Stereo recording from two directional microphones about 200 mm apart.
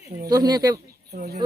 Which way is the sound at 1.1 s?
50° right (ahead or behind).